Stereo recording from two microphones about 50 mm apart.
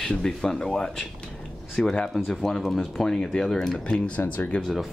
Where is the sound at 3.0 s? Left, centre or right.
Centre.